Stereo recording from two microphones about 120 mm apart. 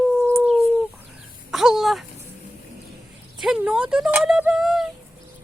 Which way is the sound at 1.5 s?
5° right (ahead or behind).